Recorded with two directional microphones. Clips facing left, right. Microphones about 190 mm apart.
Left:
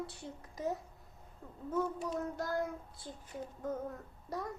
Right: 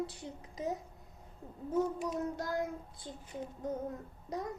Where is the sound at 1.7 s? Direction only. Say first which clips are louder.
Right 2 dB; 15° right (ahead or behind).